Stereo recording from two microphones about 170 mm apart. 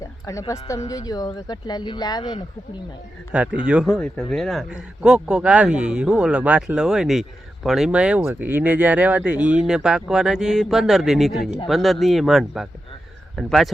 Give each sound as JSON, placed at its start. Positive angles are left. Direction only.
{"t": 0.3, "sound": "speech", "side_deg": 20}
{"t": 3.3, "sound": "a man's voice", "side_deg": -5}